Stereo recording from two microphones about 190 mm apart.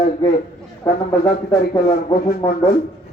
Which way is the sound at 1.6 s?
55° left (ahead or behind).